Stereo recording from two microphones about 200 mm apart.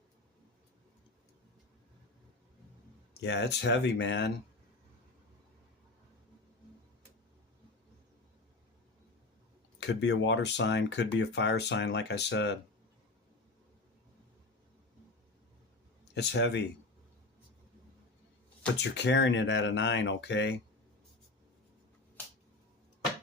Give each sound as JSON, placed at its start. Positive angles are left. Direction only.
{"t": 3.2, "sound": "speech", "side_deg": 60}
{"t": 9.8, "sound": "speech", "side_deg": 65}
{"t": 16.1, "sound": "speech", "side_deg": 60}
{"t": 18.8, "sound": "speech", "side_deg": 60}